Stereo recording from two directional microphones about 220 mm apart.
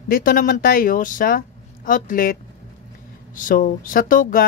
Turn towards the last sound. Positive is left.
turn(degrees=40)  # may be behind; listen again after turning